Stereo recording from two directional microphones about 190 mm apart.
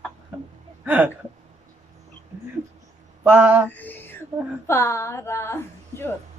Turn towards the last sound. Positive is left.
turn(degrees=10)  # may be behind; listen again after turning